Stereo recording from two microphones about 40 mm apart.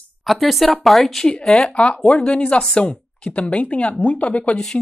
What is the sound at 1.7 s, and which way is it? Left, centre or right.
Speech, left.